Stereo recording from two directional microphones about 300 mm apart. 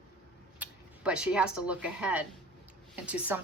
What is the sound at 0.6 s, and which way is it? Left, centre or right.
A woman's voice, centre.